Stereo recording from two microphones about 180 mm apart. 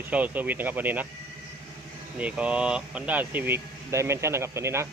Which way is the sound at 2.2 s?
5° right (ahead or behind).